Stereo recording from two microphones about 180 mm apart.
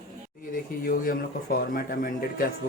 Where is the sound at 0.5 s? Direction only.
50° left (ahead or behind).